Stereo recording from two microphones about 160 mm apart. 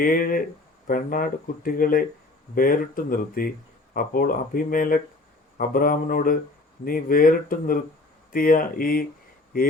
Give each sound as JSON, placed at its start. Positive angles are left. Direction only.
{"t": 0.0, "sound": "speech", "side_deg": 60}